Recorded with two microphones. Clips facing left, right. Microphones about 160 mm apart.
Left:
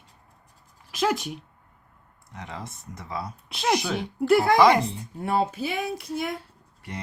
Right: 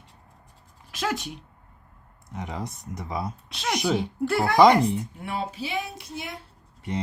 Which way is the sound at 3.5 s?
20° left (ahead or behind).